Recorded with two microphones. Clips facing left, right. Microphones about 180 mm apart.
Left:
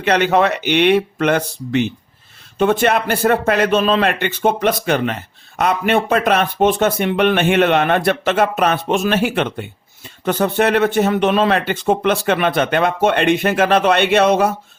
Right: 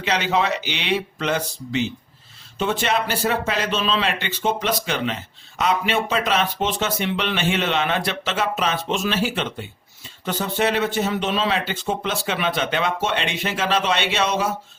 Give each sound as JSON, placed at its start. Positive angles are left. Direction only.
{"t": 0.0, "sound": "speech", "side_deg": 55}